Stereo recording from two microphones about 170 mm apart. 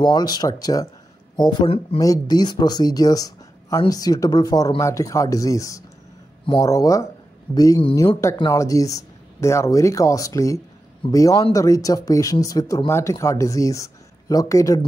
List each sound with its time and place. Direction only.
0.0 s speech: 25° left (ahead or behind)